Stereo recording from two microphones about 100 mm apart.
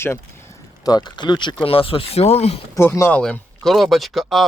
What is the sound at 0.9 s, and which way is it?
Speech, 45° left (ahead or behind).